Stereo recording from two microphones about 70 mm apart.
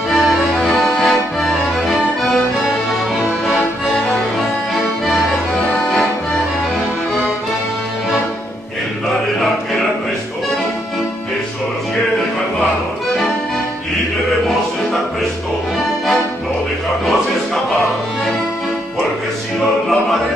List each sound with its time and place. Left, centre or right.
0.1 s music: centre
3.4 s accordion: centre
5.8 s accordion: centre